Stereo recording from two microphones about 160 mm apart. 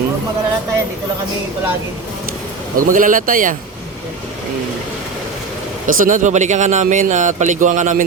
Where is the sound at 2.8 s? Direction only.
55° right (ahead or behind).